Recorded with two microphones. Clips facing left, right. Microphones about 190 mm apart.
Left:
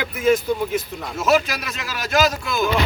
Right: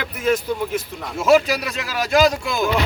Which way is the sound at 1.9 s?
30° right (ahead or behind).